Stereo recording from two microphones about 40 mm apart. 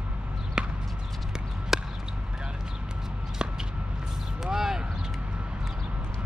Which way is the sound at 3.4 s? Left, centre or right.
Right.